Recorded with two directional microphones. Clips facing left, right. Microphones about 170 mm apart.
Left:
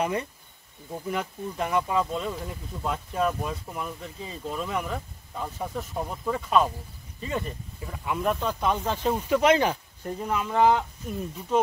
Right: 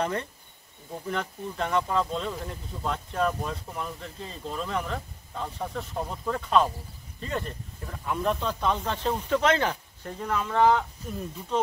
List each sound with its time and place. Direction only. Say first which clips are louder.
0.0 s speech: left 1 dB; 10° left (ahead or behind)